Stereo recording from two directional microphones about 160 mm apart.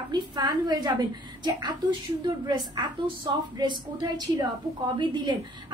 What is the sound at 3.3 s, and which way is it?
A woman's voice, 30° right (ahead or behind).